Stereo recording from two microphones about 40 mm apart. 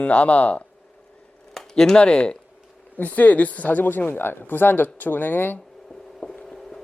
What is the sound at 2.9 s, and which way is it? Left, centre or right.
Speech, left.